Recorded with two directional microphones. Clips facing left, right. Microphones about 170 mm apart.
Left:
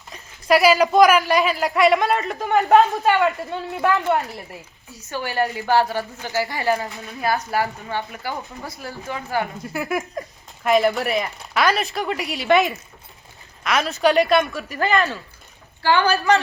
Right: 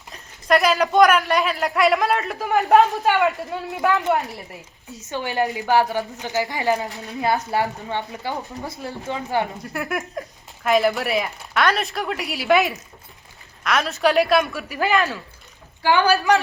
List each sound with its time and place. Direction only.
0.1 s a man's voice: 5° left (ahead or behind)
4.9 s a woman's voice: 20° right (ahead or behind)
9.6 s a man's voice: centre (ahead or behind)